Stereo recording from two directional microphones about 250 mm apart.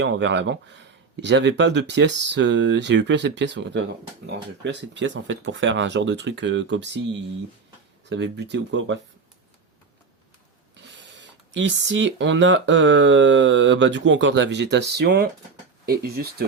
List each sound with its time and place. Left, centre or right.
0.0 s speech: right
10.8 s speech: right